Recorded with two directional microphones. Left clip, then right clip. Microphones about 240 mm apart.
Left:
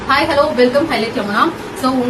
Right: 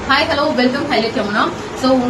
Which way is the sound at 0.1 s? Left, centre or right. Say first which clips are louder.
Left 2 dB; centre.